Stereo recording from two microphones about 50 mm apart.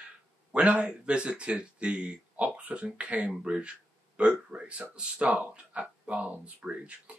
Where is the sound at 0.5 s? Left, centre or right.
Right.